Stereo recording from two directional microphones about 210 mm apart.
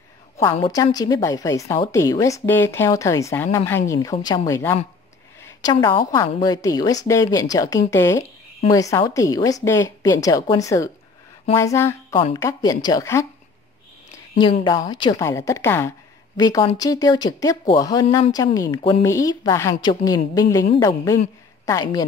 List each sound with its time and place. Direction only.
0.4 s a woman's voice: 15° left (ahead or behind)
14.4 s a woman's voice: 20° left (ahead or behind)